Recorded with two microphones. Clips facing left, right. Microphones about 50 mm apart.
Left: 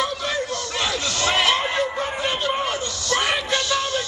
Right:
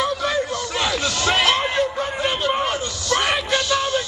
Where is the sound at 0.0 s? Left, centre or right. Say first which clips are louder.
Right 3 dB; centre.